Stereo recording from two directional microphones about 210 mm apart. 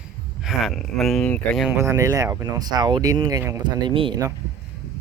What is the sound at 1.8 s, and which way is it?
Speech, 15° right (ahead or behind).